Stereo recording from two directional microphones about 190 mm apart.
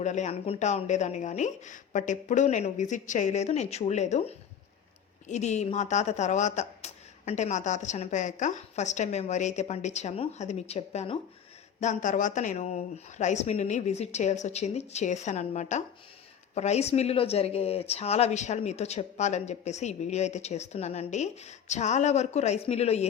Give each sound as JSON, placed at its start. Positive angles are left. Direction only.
{"t": 0.0, "sound": "a woman's voice", "side_deg": 40}